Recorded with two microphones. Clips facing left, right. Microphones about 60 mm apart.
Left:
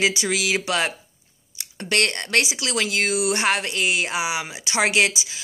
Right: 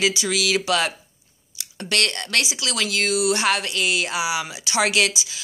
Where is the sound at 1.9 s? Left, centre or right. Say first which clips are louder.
Left 2 dB; left.